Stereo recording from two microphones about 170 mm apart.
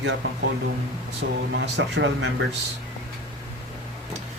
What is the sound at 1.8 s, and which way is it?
Speech, 90° right.